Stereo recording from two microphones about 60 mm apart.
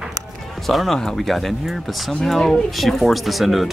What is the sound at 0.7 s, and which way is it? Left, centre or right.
Speech, centre.